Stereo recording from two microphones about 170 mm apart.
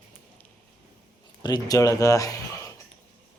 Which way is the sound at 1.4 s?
20° left (ahead or behind).